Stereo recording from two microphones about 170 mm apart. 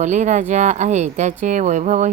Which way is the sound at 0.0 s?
45° right (ahead or behind).